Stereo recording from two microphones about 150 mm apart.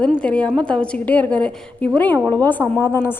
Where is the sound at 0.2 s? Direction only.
5° left (ahead or behind).